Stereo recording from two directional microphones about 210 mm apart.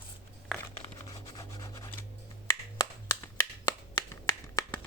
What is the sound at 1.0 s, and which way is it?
Rub, 20° left (ahead or behind).